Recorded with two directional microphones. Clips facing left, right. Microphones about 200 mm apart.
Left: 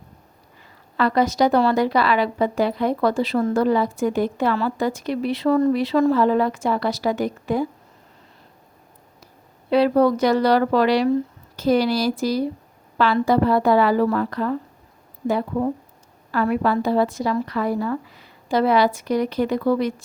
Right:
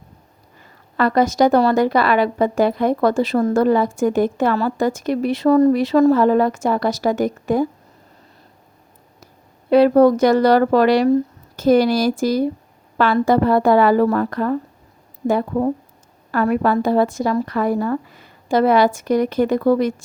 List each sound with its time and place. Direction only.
0.6 s a woman's voice: 45° right (ahead or behind)
9.2 s a woman's voice: 50° right (ahead or behind)